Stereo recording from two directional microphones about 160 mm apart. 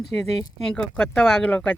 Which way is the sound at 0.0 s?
Centre (ahead or behind).